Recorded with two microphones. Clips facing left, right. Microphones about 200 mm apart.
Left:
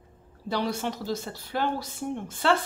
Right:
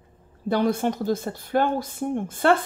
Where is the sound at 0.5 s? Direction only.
50° right (ahead or behind).